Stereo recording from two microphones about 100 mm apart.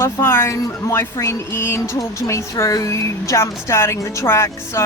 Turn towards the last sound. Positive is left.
turn(degrees=25)  # may be behind; listen again after turning